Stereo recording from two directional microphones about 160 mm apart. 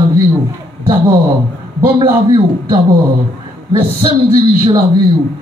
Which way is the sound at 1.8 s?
30° right (ahead or behind).